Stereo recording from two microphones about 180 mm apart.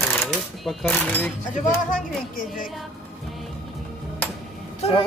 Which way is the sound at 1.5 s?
45° left (ahead or behind).